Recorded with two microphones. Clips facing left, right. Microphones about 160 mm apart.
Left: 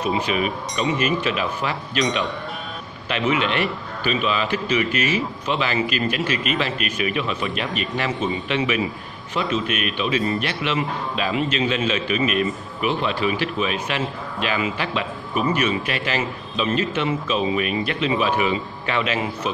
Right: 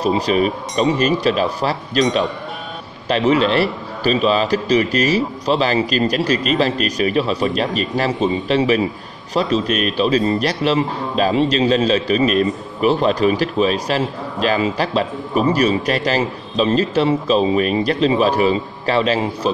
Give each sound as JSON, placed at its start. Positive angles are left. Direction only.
{"t": 0.0, "sound": "a man's voice", "side_deg": -35}
{"t": 3.1, "sound": "a man's voice", "side_deg": -35}